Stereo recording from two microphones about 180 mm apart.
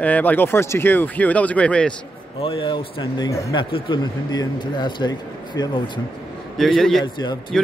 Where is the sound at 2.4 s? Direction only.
30° left (ahead or behind).